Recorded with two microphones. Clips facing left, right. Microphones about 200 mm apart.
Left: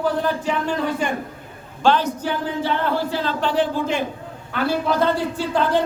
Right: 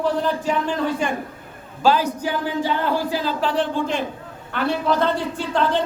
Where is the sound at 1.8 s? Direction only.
10° right (ahead or behind).